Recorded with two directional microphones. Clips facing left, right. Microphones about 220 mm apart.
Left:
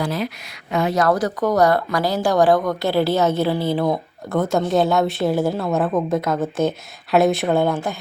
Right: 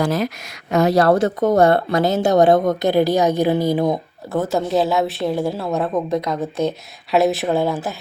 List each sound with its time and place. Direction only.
0.0 s a woman's voice: 45° right (ahead or behind); by 4.0 s 15° right (ahead or behind)
4.3 s a woman's voice: 5° right (ahead or behind)